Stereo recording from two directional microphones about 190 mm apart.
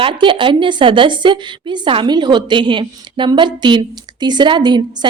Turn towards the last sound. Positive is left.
turn(degrees=-25)  # may be behind; listen again after turning